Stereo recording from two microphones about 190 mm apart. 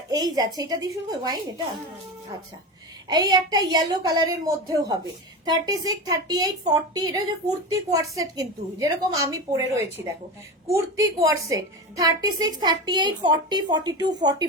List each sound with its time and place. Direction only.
0.1 s a woman's voice: 20° right (ahead or behind)
3.1 s a woman's voice: 20° right (ahead or behind)